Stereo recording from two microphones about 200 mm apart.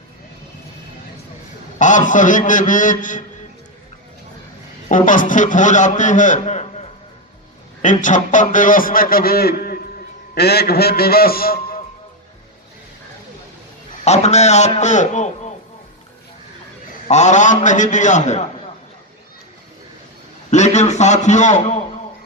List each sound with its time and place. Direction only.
1.8 s a man's voice: 40° left (ahead or behind)
4.9 s a man's voice: 40° left (ahead or behind)
14.0 s a man's voice: 35° left (ahead or behind)
17.1 s a man's voice: 35° left (ahead or behind)
20.5 s a man's voice: 35° left (ahead or behind)